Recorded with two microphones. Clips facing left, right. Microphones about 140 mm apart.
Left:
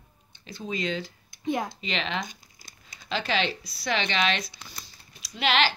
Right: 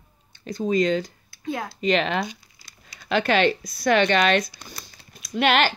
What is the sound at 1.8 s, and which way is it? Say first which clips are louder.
Speech: right 9 dB; 45° right (ahead or behind).